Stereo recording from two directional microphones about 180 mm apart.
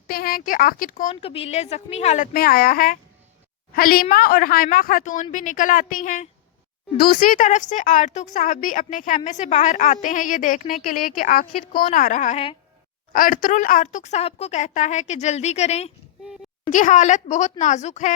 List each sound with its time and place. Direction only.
0.1 s speech: 55° left (ahead or behind)
1.1 s a woman's voice: 30° left (ahead or behind)
13.1 s a woman's voice: 50° left (ahead or behind)